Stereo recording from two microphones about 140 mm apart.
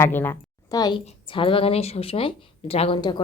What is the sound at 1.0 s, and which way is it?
A woman's voice, 40° left (ahead or behind).